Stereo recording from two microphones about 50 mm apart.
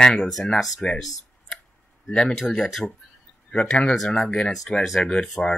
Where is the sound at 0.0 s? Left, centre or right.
Centre.